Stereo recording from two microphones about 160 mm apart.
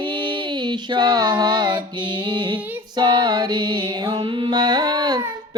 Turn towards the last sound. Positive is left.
turn(degrees=-25)  # may be behind; listen again after turning